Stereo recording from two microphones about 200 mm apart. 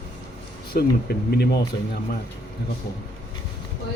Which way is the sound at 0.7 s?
50° left (ahead or behind).